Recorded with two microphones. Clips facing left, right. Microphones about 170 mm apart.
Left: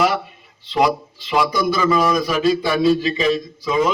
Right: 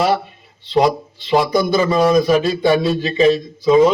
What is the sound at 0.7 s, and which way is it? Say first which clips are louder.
A man's voice: right 3 dB; 35° right (ahead or behind).